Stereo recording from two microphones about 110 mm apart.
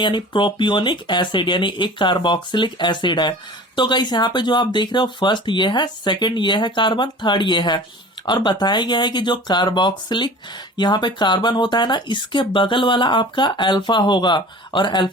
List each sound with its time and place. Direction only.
0.0 s speech: 45° left (ahead or behind)